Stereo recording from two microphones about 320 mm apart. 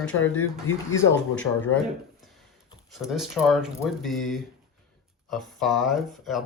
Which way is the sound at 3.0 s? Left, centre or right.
Centre.